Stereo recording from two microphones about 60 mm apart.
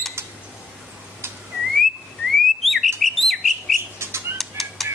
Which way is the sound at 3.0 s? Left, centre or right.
Centre.